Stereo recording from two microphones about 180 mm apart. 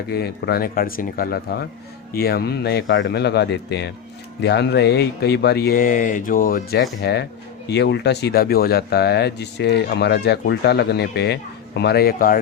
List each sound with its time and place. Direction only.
0.1 s speech: 65° left (ahead or behind)
7.0 s speech: 70° left (ahead or behind); by 12.4 s 55° left (ahead or behind)